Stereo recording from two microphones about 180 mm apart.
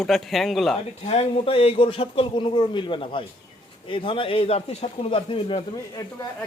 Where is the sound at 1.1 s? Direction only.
35° left (ahead or behind).